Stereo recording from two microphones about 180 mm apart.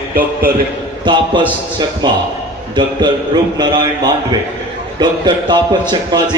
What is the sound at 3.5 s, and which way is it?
Speech, 25° right (ahead or behind).